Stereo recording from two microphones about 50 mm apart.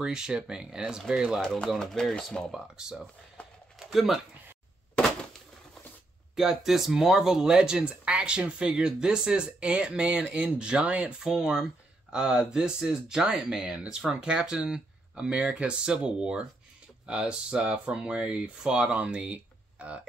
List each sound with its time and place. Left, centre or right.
0.0 s speech: centre
1.4 s speech: centre
3.8 s speech: centre
6.3 s speech: centre; by 20.0 s right